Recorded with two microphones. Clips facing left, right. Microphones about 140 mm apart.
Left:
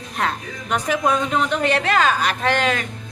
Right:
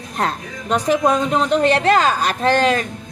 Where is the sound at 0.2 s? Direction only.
35° right (ahead or behind).